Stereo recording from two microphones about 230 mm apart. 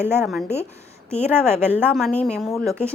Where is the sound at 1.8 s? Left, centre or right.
Centre.